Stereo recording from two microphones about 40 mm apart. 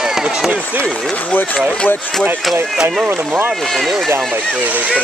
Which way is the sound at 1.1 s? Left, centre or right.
Left.